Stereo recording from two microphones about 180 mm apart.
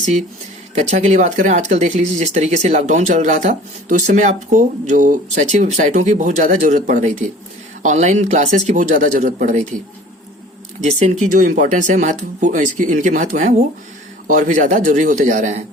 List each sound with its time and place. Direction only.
0.8 s speech: 40° right (ahead or behind)
11.0 s speech: 40° right (ahead or behind)